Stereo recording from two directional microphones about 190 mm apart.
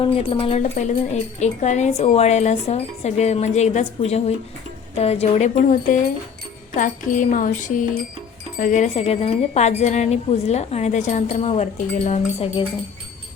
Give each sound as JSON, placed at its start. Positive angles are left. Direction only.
{"t": 0.0, "sound": "speech", "side_deg": 25}
{"t": 6.7, "sound": "a sound", "side_deg": 45}
{"t": 8.5, "sound": "speech", "side_deg": 45}